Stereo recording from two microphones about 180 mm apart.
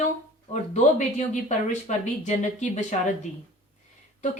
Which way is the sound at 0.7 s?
40° left (ahead or behind).